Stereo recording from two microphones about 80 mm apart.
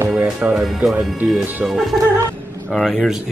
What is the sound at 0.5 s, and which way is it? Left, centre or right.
A man's voice, centre.